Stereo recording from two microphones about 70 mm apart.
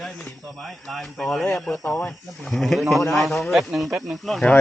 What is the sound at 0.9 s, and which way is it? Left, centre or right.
Speech, centre.